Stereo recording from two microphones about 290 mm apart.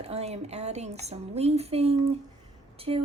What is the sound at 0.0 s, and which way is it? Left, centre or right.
Speech, right.